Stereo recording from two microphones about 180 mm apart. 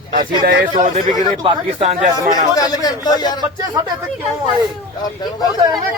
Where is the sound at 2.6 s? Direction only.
20° left (ahead or behind).